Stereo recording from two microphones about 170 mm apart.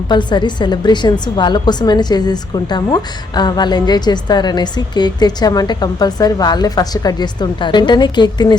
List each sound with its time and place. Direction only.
0.1 s speech: 25° left (ahead or behind)